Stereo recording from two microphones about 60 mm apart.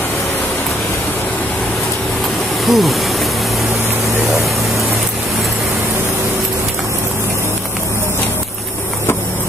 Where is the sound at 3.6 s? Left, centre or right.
Right.